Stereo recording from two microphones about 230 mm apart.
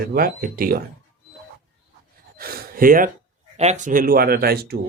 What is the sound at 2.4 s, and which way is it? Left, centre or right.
Speech, right.